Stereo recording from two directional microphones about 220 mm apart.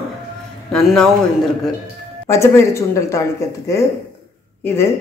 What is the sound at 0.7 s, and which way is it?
Speech, 5° left (ahead or behind).